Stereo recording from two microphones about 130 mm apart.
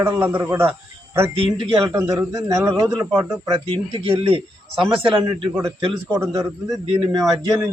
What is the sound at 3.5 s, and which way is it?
A man's voice, 40° right (ahead or behind).